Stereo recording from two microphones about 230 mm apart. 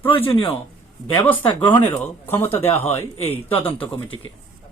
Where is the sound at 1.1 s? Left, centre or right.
Centre.